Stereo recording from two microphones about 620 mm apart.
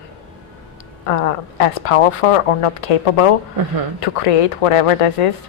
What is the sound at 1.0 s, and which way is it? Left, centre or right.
Speech, left.